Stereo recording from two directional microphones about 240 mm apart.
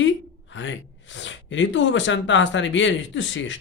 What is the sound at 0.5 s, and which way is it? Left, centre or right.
Speech, left.